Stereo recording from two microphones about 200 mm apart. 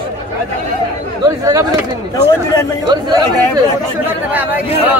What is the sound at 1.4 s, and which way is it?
Speech, 20° right (ahead or behind).